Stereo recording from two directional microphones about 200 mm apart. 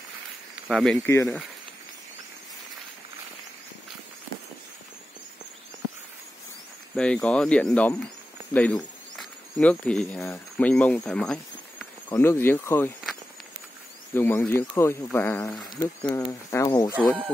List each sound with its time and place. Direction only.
0.7 s speech: centre (ahead or behind)
0.9 s speech: 15° left (ahead or behind)
7.2 s speech: 5° left (ahead or behind)
11.1 s insect: 5° left (ahead or behind)
12.1 s speech: 10° left (ahead or behind)
14.1 s speech: 10° left (ahead or behind)
16.1 s speech: 20° left (ahead or behind)
16.9 s speech: 10° right (ahead or behind)